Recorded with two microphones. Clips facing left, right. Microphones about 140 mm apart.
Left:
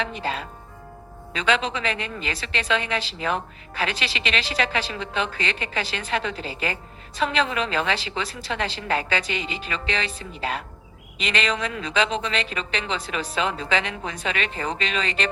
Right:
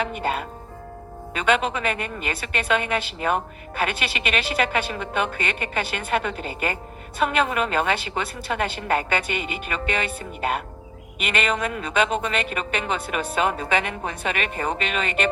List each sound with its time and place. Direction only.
0.0 s a woman's voice: 55° right (ahead or behind)